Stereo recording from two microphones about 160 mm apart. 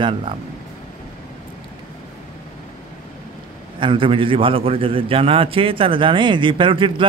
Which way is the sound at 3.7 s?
30° right (ahead or behind).